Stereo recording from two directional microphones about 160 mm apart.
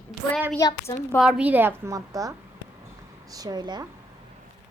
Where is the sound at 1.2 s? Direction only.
5° right (ahead or behind); by 3.9 s 25° right (ahead or behind).